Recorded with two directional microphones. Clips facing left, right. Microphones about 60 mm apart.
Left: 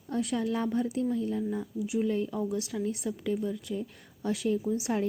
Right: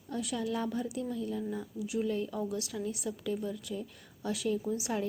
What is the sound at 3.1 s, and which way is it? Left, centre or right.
Speech, centre.